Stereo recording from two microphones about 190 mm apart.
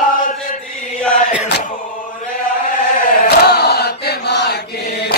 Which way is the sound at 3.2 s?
60° left (ahead or behind).